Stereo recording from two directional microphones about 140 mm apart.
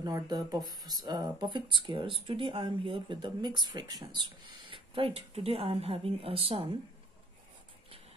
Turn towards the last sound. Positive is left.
turn(degrees=-40)  # may be behind; listen again after turning